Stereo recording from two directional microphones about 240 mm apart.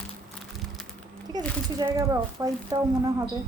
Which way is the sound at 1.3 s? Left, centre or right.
Centre.